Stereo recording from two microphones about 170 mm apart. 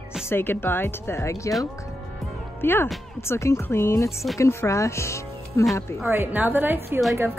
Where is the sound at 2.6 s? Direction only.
15° left (ahead or behind).